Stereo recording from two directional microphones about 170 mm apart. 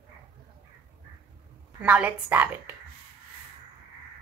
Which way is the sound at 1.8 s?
10° right (ahead or behind).